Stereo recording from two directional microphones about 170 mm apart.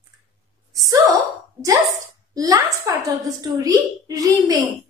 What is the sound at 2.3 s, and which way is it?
A woman's voice, 20° right (ahead or behind).